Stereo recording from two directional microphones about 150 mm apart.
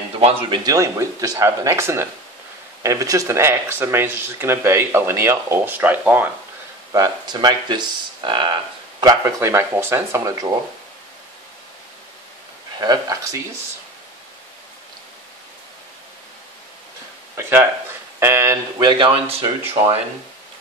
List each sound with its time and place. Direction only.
0.2 s speech: 40° right (ahead or behind)
0.7 s speech: 20° right (ahead or behind)
6.9 s speech: 25° right (ahead or behind)
12.8 s speech: 25° right (ahead or behind)
17.4 s speech: 15° right (ahead or behind)
18.8 s speech: 30° right (ahead or behind)